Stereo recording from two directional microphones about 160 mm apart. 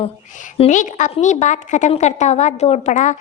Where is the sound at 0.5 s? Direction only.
35° left (ahead or behind).